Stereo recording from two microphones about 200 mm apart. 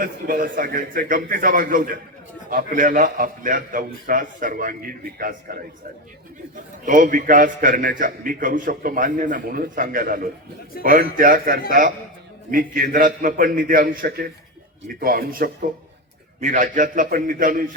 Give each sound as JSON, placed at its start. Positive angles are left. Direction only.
{"t": 0.0, "sound": "a man's voice", "side_deg": -45}
{"t": 6.8, "sound": "a man's voice", "side_deg": -40}